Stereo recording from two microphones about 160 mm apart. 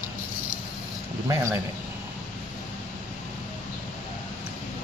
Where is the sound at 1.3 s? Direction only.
20° right (ahead or behind).